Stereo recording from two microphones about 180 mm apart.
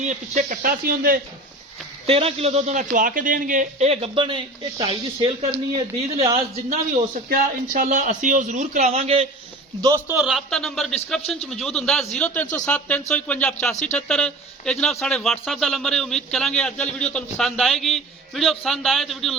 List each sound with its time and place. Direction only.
0.0 s a man's voice: 45° right (ahead or behind)
2.0 s a man's voice: 35° right (ahead or behind)
7.3 s a man's voice: 45° right (ahead or behind)
9.8 s a man's voice: 15° right (ahead or behind)
10.2 s a man's voice: centre (ahead or behind)